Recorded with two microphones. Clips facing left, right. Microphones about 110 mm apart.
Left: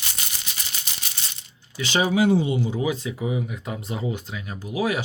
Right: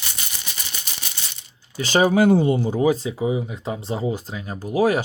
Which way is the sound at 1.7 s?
40° right (ahead or behind).